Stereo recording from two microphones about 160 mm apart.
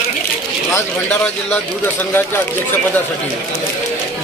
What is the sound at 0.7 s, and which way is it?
Speech, 10° left (ahead or behind).